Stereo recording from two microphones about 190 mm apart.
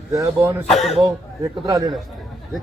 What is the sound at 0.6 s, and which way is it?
Speech, centre (ahead or behind).